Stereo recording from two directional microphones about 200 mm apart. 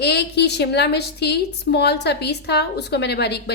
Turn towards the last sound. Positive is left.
turn(degrees=55)  # may be behind; listen again after turning